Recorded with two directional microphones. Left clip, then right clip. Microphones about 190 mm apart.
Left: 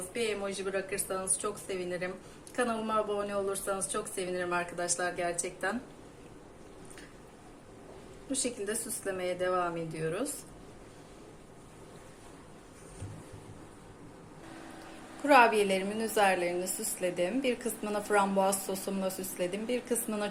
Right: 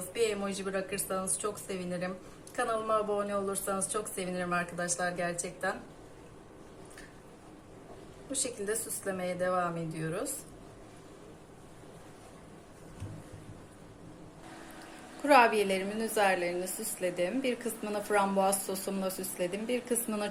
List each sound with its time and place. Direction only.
0.2 s a woman's voice: 30° left (ahead or behind)
8.3 s speech: 30° left (ahead or behind)
15.2 s a woman's voice: 5° right (ahead or behind)